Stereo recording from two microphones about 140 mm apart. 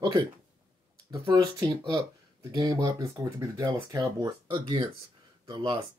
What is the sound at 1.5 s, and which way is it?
Speech, 30° right (ahead or behind).